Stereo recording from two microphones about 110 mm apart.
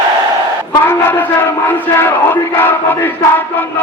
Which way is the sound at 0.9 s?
15° left (ahead or behind).